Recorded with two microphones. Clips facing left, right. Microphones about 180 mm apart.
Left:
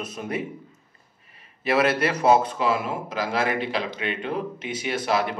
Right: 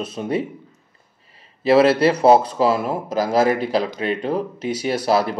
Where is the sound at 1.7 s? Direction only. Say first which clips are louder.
Right 8 dB; 30° right (ahead or behind).